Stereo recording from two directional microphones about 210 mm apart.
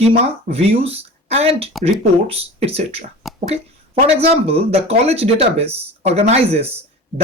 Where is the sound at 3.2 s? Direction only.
Centre (ahead or behind).